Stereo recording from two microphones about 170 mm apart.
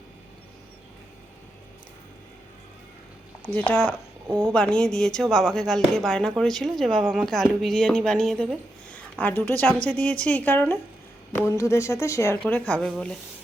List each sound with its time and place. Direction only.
3.7 s speech: 10° left (ahead or behind)